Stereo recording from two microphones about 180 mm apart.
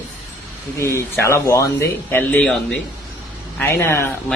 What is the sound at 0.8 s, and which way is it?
Speech, 15° left (ahead or behind).